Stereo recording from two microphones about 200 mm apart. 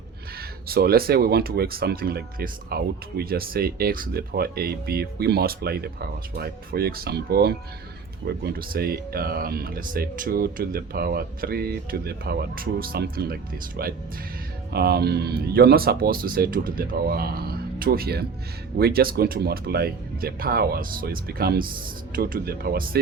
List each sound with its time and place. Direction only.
0.7 s speech: 50° right (ahead or behind)